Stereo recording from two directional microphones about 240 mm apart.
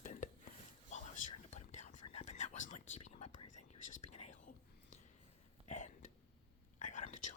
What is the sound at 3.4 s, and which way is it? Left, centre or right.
Whispering, left.